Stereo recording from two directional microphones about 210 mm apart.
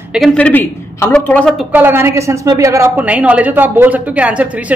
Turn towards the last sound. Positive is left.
turn(degrees=-5)  # may be behind; listen again after turning